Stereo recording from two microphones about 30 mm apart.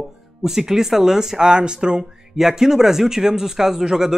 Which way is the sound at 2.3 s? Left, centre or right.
Centre.